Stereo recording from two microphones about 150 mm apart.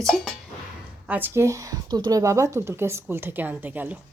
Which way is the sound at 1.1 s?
15° right (ahead or behind).